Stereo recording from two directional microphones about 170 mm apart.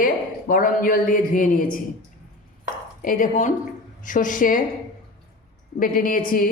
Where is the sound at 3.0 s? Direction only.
50° left (ahead or behind).